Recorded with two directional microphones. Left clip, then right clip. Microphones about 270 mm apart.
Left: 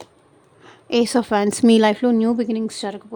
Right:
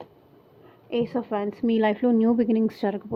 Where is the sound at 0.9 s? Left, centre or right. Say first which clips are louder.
Left 8 dB; left.